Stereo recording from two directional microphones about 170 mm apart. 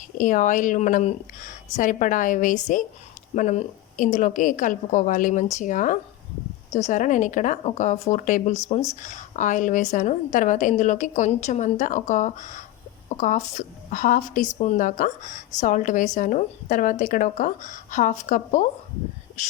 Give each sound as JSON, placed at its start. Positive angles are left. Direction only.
{"t": 0.2, "sound": "a woman's voice", "side_deg": 50}